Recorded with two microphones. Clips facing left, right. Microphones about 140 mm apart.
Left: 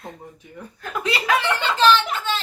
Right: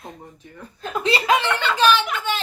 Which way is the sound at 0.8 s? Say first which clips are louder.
Right 4 dB; 25° right (ahead or behind).